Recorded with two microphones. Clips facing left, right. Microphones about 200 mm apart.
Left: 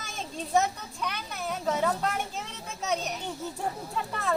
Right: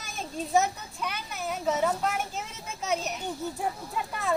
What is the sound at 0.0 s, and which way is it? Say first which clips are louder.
A child's voice: right 2 dB; 5° right (ahead or behind).